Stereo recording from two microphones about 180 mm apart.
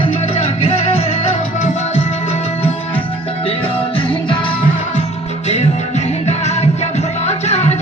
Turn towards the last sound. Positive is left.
turn(degrees=35)  # may be behind; listen again after turning